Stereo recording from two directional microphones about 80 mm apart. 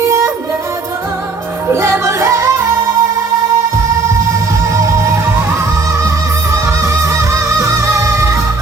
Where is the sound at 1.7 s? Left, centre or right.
Right.